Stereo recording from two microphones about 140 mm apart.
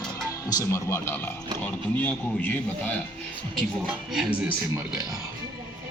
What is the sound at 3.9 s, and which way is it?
Speech, 5° right (ahead or behind).